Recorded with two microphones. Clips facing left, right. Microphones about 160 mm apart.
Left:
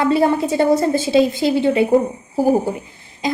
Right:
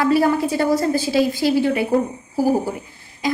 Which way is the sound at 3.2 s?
20° left (ahead or behind).